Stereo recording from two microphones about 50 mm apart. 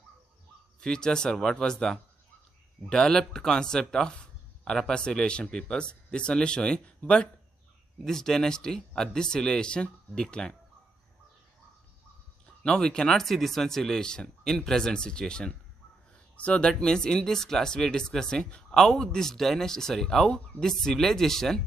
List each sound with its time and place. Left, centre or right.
0.7 s a man's voice: centre
7.0 s speech: left
8.0 s speech: centre
12.6 s speech: centre